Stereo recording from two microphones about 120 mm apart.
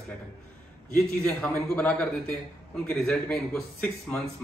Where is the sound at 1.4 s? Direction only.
10° left (ahead or behind).